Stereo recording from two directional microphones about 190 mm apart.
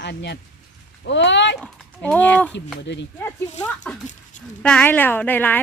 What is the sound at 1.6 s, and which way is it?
Speech, 5° left (ahead or behind).